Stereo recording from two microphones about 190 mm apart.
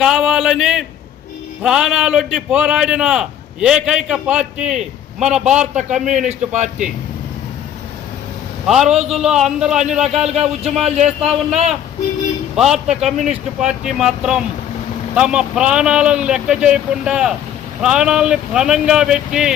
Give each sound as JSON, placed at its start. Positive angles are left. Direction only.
{"t": 0.0, "sound": "a man's voice", "side_deg": 0}
{"t": 6.2, "sound": "speech", "side_deg": -35}
{"t": 8.6, "sound": "a man's voice", "side_deg": -5}
{"t": 12.5, "sound": "a man's voice", "side_deg": -5}